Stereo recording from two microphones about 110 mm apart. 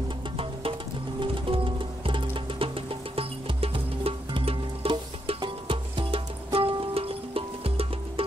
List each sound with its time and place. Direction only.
1.2 s music: 50° right (ahead or behind)